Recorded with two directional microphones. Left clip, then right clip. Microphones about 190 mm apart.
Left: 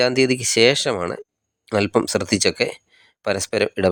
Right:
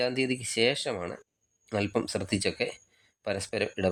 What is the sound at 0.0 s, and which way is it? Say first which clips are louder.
Speech: left 11 dB; 40° left (ahead or behind).